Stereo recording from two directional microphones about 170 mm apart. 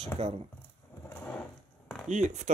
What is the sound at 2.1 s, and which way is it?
Speech, 45° right (ahead or behind).